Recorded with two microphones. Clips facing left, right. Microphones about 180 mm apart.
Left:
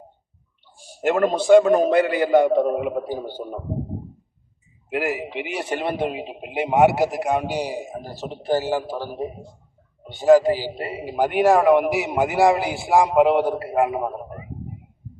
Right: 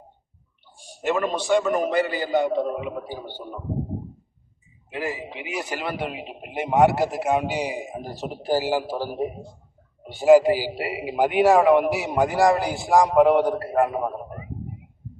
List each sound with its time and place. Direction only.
1.0 s a man's voice: 55° left (ahead or behind)
5.0 s a man's voice: 70° left (ahead or behind)
5.5 s a man's voice: 30° left (ahead or behind)
6.7 s a man's voice: 5° left (ahead or behind)